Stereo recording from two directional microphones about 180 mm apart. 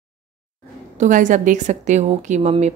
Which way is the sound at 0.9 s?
45° right (ahead or behind).